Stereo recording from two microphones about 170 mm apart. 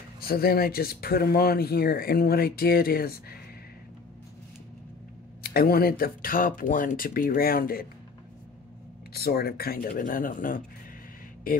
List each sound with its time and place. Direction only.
0.2 s speech: 65° left (ahead or behind)
5.4 s speech: 65° left (ahead or behind)
9.1 s speech: 65° left (ahead or behind)